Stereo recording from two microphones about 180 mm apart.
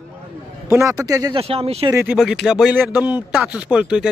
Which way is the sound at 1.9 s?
10° right (ahead or behind).